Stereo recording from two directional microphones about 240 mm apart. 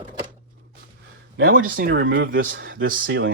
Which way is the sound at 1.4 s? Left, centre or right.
Right.